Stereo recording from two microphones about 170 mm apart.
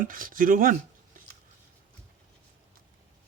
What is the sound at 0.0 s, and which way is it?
Speech, 55° right (ahead or behind).